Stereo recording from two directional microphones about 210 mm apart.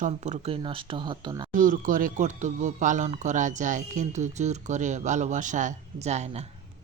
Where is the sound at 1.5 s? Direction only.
40° right (ahead or behind).